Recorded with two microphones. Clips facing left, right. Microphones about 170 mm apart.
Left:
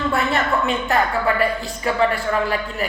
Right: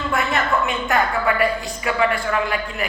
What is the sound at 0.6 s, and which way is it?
A woman's voice, 35° left (ahead or behind).